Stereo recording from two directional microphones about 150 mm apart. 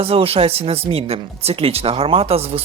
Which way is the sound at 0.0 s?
40° right (ahead or behind).